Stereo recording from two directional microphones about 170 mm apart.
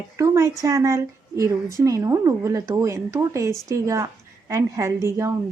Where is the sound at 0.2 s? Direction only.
20° right (ahead or behind).